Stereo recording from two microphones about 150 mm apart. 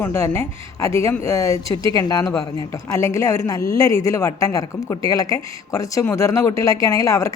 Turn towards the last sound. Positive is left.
turn(degrees=20)  # may be behind; listen again after turning